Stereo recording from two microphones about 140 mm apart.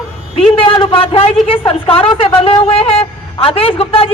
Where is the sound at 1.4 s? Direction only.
40° left (ahead or behind).